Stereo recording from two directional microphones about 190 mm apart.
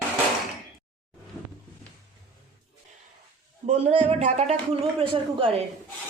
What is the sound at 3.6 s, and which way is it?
A man's voice, 35° right (ahead or behind).